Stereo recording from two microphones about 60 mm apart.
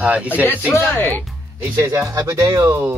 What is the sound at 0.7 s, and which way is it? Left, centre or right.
Speech, left.